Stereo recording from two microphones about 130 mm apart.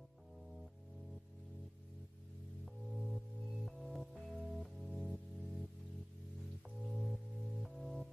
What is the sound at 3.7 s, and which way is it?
Music, centre (ahead or behind).